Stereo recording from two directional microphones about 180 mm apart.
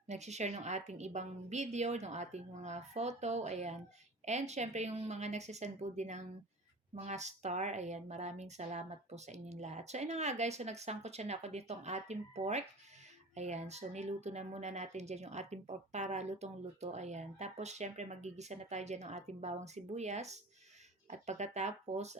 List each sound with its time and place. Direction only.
0.1 s speech: 40° right (ahead or behind)